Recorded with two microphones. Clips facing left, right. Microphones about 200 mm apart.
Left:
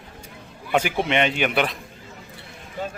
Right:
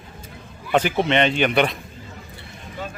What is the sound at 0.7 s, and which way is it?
A man's voice, 10° left (ahead or behind).